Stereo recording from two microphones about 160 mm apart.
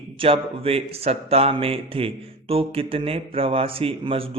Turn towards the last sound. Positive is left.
turn(degrees=-35)  # may be behind; listen again after turning